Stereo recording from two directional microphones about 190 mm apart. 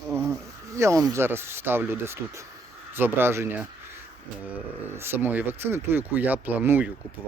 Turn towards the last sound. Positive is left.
turn(degrees=-10)  # may be behind; listen again after turning